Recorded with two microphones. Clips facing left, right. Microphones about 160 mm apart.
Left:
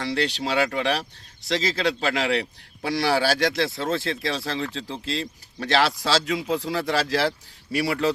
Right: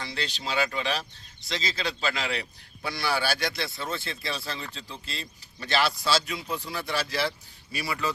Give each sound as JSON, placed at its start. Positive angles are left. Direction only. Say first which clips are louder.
{"t": 0.0, "sound": "a man's voice", "louder": "left 9 dB", "side_deg": 70}